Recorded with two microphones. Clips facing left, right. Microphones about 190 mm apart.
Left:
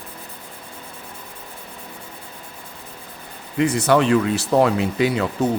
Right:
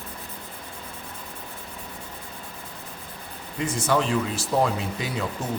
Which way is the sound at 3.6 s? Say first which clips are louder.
Left 7 dB; 70° left (ahead or behind).